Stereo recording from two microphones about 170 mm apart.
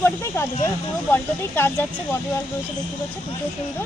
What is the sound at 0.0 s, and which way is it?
Speech, 15° left (ahead or behind).